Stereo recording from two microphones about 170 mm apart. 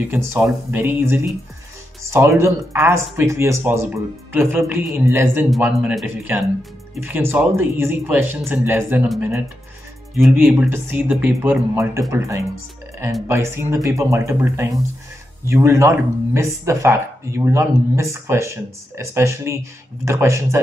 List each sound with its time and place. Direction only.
0.0 s speech: 10° right (ahead or behind)
10.3 s speech: 10° right (ahead or behind)